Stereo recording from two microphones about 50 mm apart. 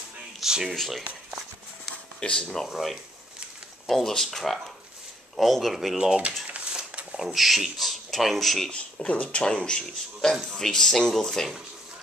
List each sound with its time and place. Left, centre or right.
0.4 s speech: centre
0.7 s speech: centre
2.1 s speech: centre
2.7 s speech: centre
5.9 s speech: centre
8.7 s speech: left; by 11.5 s centre